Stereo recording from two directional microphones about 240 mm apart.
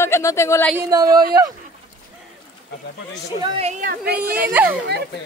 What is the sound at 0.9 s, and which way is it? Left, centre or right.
Speech, centre.